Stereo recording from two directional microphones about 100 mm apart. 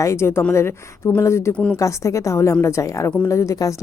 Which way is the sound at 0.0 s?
30° left (ahead or behind).